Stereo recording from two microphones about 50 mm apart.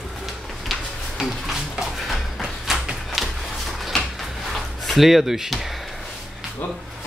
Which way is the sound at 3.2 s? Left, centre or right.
Centre.